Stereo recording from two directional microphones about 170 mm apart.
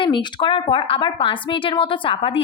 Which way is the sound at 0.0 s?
25° left (ahead or behind).